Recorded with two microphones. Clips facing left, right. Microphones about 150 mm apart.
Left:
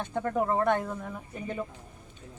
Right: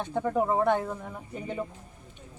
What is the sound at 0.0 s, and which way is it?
Speech, 10° right (ahead or behind).